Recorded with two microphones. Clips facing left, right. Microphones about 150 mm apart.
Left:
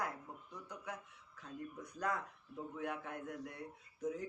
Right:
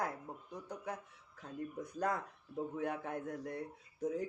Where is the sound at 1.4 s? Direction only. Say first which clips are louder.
Right 4 dB; 45° right (ahead or behind).